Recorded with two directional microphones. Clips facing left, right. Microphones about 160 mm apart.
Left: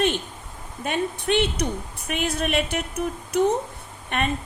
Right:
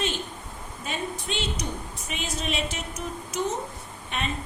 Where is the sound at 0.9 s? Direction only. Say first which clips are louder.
Left 8 dB; 65° left (ahead or behind).